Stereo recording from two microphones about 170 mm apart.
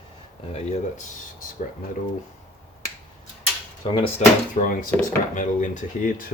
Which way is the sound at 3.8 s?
35° left (ahead or behind).